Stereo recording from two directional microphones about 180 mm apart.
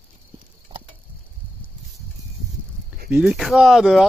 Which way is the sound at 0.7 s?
25° right (ahead or behind).